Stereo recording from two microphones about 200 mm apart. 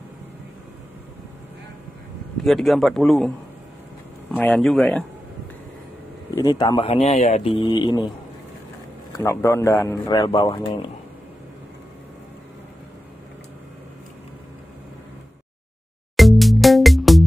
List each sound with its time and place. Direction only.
2.4 s a man's voice: centre (ahead or behind)
4.4 s a man's voice: 5° left (ahead or behind)
6.3 s speech: 20° left (ahead or behind)
9.1 s speech: 15° left (ahead or behind)
16.2 s music: centre (ahead or behind)